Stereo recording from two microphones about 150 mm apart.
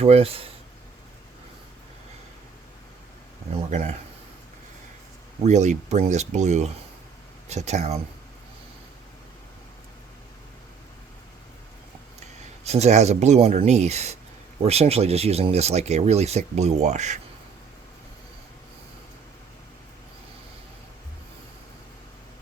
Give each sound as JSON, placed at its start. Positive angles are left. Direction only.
{"t": 0.0, "sound": "speech", "side_deg": -40}
{"t": 3.7, "sound": "speech", "side_deg": -50}
{"t": 5.4, "sound": "speech", "side_deg": -50}
{"t": 12.6, "sound": "speech", "side_deg": -45}